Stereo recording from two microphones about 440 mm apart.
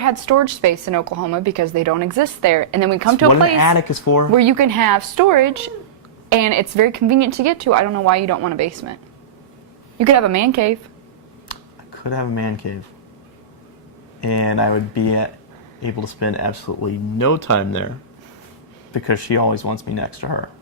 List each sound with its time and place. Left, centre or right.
0.0 s speech: right
3.6 s speech: left
4.4 s a woman's voice: right
10.0 s speech: right
11.4 s camera: left
14.2 s speech: left
18.9 s speech: left